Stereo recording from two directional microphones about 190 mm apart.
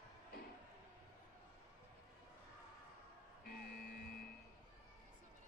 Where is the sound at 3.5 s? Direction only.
55° left (ahead or behind).